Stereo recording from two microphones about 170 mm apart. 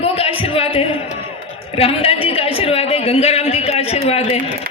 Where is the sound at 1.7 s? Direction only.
35° left (ahead or behind).